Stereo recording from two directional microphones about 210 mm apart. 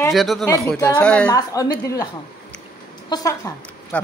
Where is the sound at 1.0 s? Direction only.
5° left (ahead or behind).